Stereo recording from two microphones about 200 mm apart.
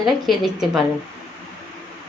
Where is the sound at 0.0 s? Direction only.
Centre (ahead or behind).